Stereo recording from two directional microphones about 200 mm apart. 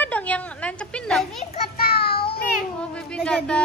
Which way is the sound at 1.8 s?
50° left (ahead or behind).